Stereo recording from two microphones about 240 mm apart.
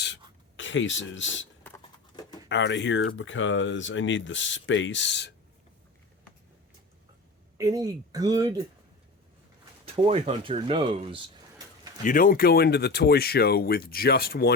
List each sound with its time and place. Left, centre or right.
0.0 s writing: left
1.6 s a sound: centre
2.5 s speech: left
7.6 s speech: centre
9.8 s speech: right
12.0 s speech: left